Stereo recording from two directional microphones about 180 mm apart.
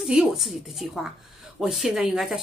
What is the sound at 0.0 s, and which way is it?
Speech, centre (ahead or behind).